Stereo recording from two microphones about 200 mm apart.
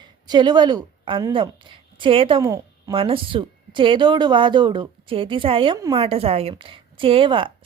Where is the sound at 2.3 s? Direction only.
15° right (ahead or behind).